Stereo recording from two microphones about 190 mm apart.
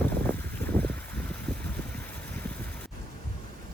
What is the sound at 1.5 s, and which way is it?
Vehicle, 5° left (ahead or behind).